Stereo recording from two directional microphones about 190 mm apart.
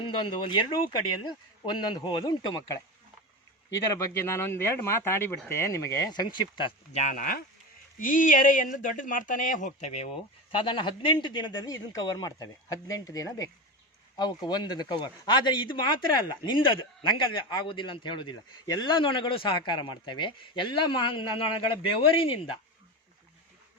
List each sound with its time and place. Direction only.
0.0 s a man's voice: 25° left (ahead or behind)
2.0 s a man's voice: 25° left (ahead or behind)
3.9 s a man's voice: 15° left (ahead or behind)